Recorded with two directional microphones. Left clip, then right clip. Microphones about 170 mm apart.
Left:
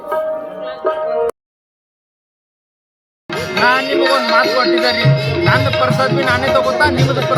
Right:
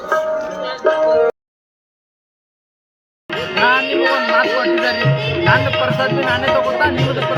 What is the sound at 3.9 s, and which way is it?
Speech, 65° left (ahead or behind).